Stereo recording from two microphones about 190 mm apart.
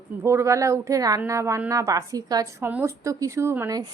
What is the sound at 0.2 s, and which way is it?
A woman's voice, 15° right (ahead or behind).